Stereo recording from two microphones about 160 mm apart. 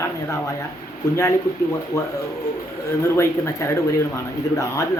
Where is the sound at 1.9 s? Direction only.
20° left (ahead or behind).